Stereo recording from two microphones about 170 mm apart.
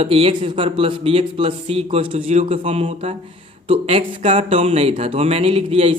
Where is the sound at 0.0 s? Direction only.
35° right (ahead or behind).